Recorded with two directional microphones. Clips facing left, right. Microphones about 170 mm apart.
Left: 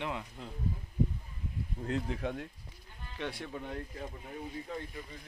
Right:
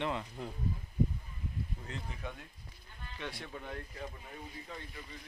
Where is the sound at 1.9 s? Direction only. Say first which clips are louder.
Left 10 dB; 75° left (ahead or behind).